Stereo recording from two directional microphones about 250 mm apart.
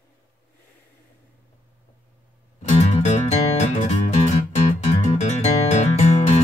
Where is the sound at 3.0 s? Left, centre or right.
Left.